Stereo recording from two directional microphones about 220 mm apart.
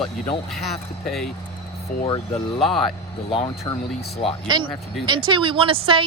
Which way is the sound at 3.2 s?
25° left (ahead or behind).